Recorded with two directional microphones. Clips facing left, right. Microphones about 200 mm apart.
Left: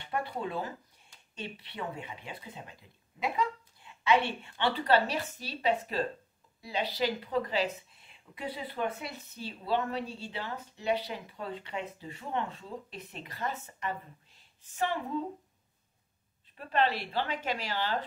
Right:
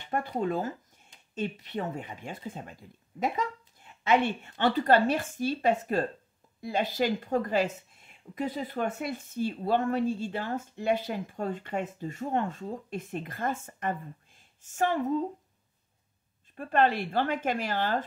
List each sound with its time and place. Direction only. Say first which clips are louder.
0.4 s a woman's voice: right 6 dB; 45° right (ahead or behind)
16.5 s a woman's voice: right 4 dB; 50° right (ahead or behind)